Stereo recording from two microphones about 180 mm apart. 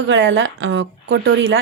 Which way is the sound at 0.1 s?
90° right.